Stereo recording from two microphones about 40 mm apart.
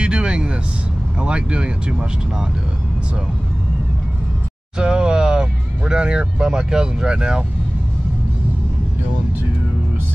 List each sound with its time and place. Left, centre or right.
0.0 s vehicle: right
1.2 s speech: right
4.7 s speech: right